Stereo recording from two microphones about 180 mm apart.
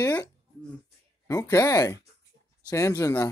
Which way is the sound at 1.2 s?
20° left (ahead or behind).